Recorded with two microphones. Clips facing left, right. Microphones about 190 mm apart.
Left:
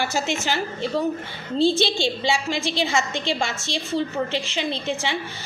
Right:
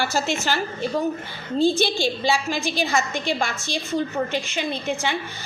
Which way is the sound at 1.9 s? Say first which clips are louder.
Right 1 dB; 25° left (ahead or behind).